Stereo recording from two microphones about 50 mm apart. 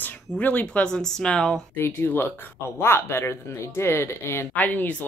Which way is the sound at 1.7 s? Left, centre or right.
Left.